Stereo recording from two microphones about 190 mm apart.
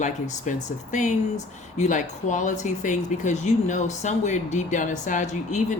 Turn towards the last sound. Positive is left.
turn(degrees=40)  # may be behind; listen again after turning